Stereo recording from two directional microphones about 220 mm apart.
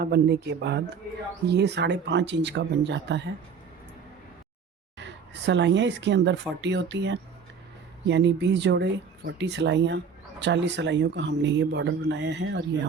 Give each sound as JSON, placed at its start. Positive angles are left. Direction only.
{"t": 0.0, "sound": "speech", "side_deg": -50}
{"t": 4.9, "sound": "speech", "side_deg": -55}